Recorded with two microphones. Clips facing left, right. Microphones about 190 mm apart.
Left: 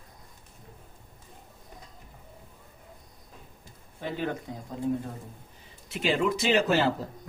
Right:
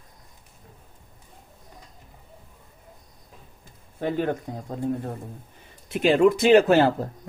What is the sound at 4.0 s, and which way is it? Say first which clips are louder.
Speech: right 7 dB; 55° right (ahead or behind).